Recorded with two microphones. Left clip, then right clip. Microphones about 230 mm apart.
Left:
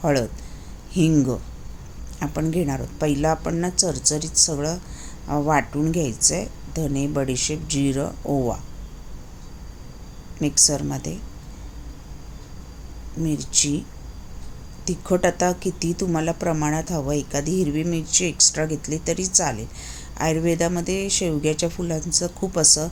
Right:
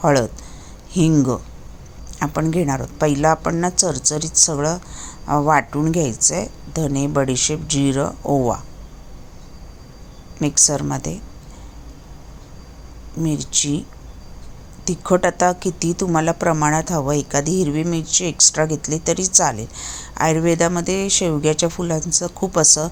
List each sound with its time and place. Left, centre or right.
0.0 s a woman's voice: centre
8.2 s speech: right
10.4 s a woman's voice: centre
13.1 s a woman's voice: centre
14.8 s a woman's voice: centre